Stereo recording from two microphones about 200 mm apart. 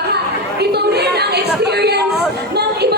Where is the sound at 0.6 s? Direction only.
55° right (ahead or behind).